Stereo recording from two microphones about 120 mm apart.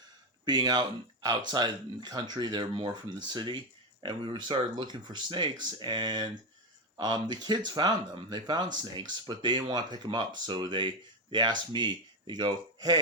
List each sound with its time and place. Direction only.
0.4 s speech: 35° right (ahead or behind)